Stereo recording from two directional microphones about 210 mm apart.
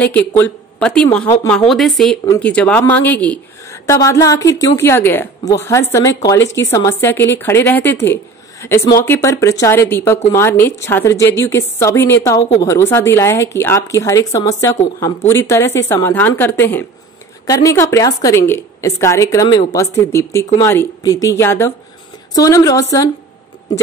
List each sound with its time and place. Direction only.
0.0 s a woman's voice: 10° left (ahead or behind)